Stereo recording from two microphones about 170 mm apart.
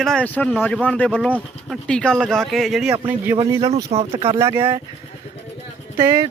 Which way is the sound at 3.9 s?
35° right (ahead or behind).